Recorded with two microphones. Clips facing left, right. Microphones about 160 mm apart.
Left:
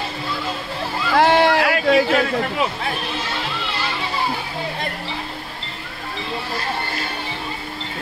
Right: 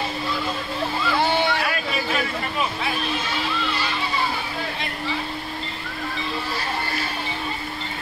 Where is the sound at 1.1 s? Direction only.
90° left.